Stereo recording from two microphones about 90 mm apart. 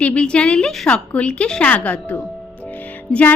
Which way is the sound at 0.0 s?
10° left (ahead or behind).